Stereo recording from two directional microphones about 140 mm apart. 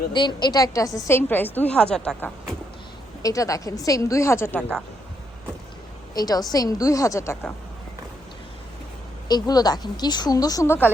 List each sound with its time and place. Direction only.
0.1 s speech: 35° left (ahead or behind); by 2.6 s 5° left (ahead or behind)
3.2 s speech: 25° left (ahead or behind)
6.1 s speech: 30° left (ahead or behind)
9.3 s speech: 30° left (ahead or behind)